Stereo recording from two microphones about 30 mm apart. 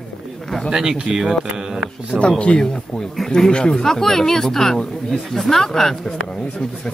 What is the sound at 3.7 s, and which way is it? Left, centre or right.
Speech, centre.